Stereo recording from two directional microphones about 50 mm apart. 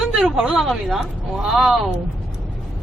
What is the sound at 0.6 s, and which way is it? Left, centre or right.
Speech, centre.